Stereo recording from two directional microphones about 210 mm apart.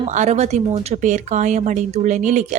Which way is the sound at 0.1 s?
35° right (ahead or behind).